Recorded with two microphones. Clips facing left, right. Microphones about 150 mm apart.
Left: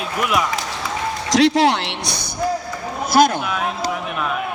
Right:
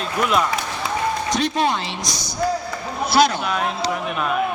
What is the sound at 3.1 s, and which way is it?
Speech, 45° left (ahead or behind).